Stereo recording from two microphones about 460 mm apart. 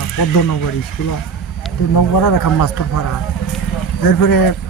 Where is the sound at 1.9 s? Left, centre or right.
Left.